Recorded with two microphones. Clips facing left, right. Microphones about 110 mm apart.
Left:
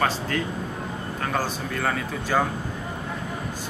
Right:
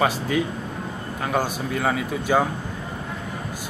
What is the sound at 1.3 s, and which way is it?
Speech, 10° right (ahead or behind).